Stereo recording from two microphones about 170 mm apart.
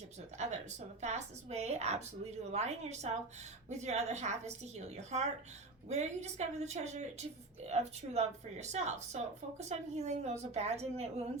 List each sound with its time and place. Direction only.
0.4 s a woman's voice: 40° right (ahead or behind)